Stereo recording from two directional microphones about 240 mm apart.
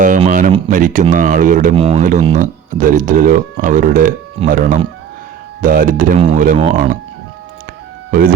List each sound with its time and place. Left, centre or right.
0.3 s speech: right